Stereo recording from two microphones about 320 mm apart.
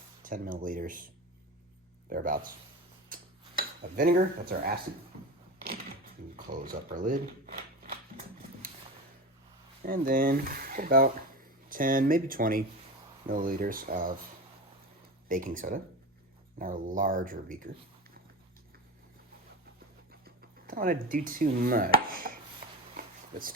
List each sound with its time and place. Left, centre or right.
0.2 s speech: right
2.0 s speech: right
3.6 s cutlery: right
5.5 s a sound: right
6.3 s speech: right
9.8 s speech: right
15.3 s speech: right
20.2 s speech: right
22.6 s a sound: right